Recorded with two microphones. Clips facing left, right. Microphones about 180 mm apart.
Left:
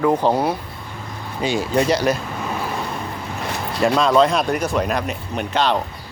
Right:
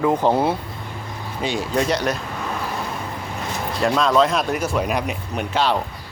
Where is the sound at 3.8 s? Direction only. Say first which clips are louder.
Left 2 dB; centre (ahead or behind).